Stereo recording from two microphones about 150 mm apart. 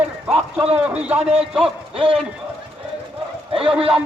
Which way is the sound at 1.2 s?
45° right (ahead or behind).